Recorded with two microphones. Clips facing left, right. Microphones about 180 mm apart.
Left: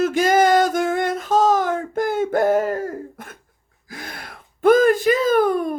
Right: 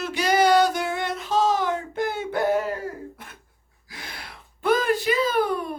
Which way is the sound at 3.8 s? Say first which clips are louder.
Left 5 dB; 50° left (ahead or behind).